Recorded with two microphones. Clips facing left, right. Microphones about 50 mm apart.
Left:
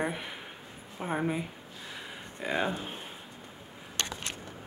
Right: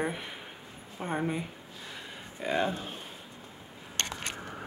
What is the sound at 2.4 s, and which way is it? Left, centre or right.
Speech, centre.